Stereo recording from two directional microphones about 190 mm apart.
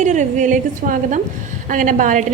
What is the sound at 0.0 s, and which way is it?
A woman's voice, 40° right (ahead or behind).